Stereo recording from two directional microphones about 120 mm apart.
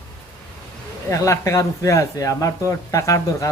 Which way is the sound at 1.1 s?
25° left (ahead or behind).